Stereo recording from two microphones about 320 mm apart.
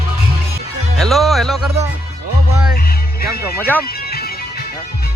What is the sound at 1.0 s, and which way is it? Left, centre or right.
Music, centre.